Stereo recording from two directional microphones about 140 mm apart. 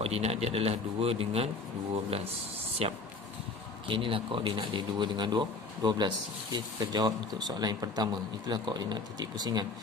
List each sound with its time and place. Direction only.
0.0 s speech: 45° right (ahead or behind)
2.8 s speech: 45° right (ahead or behind); by 9.7 s 30° right (ahead or behind)